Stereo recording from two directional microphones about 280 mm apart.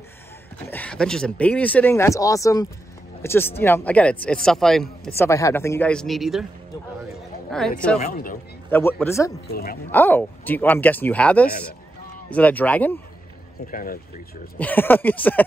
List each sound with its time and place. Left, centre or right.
0.7 s speech: centre
7.5 s speech: centre
8.0 s speech: left
8.6 s speech: centre
9.5 s speech: left
9.8 s speech: centre
13.7 s speech: left
14.6 s speech: centre